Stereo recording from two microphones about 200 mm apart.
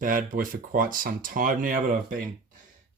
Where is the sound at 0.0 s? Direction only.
45° right (ahead or behind).